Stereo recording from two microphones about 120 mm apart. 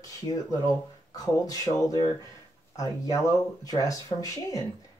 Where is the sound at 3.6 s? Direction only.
30° left (ahead or behind).